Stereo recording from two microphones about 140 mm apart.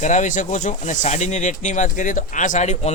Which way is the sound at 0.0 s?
60° left (ahead or behind).